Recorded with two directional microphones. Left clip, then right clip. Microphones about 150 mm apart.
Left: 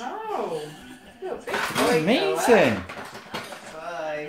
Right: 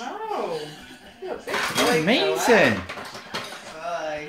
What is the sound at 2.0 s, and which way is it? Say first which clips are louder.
Speech: even; 5° left (ahead or behind).